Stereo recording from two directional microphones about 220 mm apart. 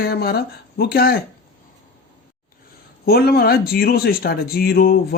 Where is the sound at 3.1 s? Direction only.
45° left (ahead or behind).